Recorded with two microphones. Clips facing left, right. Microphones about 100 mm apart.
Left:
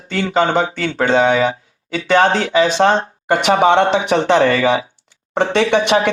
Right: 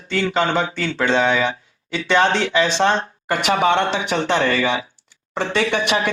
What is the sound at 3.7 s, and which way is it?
Speech, 50° left (ahead or behind).